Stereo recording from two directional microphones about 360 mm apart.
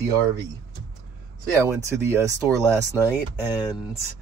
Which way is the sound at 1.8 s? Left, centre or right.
Centre.